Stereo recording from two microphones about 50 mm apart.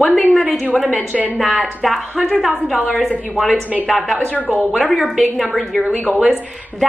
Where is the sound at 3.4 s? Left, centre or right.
Left.